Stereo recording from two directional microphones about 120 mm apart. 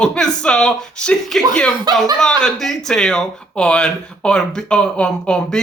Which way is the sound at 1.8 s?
35° right (ahead or behind).